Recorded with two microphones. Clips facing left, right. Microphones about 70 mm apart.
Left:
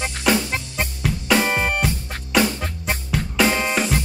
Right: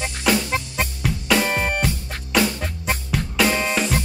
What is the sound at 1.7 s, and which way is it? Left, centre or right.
Music, centre.